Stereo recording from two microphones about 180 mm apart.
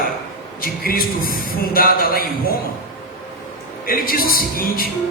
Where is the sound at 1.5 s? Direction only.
55° left (ahead or behind).